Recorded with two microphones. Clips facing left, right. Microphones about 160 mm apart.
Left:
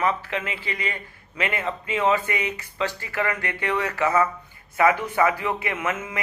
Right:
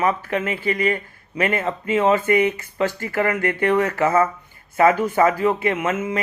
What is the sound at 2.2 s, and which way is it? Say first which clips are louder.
Speech: right 10 dB; 40° right (ahead or behind).